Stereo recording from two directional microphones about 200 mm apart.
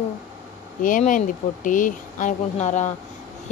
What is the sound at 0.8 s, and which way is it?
Speech, 40° left (ahead or behind).